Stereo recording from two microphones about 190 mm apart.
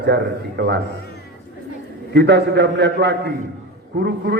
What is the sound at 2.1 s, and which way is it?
A man's voice, 60° right (ahead or behind).